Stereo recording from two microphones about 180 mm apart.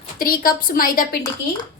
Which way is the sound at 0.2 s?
55° left (ahead or behind).